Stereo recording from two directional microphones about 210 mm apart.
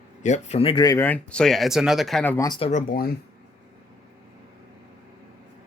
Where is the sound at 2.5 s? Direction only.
30° left (ahead or behind).